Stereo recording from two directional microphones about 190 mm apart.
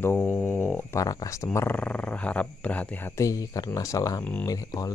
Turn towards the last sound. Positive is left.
turn(degrees=20)  # may be behind; listen again after turning